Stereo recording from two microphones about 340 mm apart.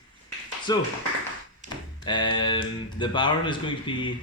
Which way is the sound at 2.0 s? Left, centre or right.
Centre.